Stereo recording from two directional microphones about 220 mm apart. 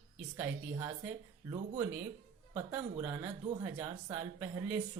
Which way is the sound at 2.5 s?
5° right (ahead or behind).